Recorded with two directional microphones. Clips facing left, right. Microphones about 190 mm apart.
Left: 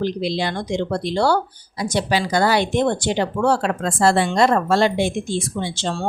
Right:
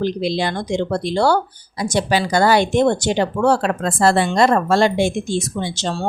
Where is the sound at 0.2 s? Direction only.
50° right (ahead or behind).